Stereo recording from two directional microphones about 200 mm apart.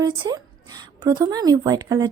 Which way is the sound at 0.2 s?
20° right (ahead or behind).